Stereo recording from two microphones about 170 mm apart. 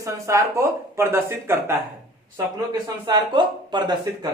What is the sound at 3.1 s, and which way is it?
Speech, 25° right (ahead or behind).